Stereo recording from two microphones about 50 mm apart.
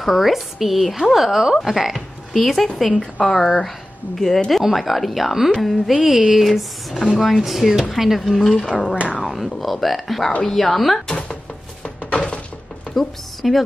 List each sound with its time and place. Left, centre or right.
0.0 s speech: centre
3.0 s a woman's voice: centre
3.4 s speech: centre
5.9 s a sound: centre
6.3 s speech: centre
9.2 s a sound: centre
9.6 s speech: centre
11.1 s a sound: centre
12.9 s speech: centre